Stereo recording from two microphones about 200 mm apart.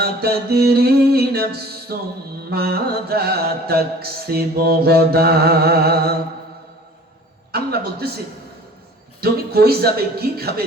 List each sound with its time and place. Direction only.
0.0 s music: 50° right (ahead or behind)
7.5 s a man's voice: 50° right (ahead or behind)
9.2 s music: 50° right (ahead or behind)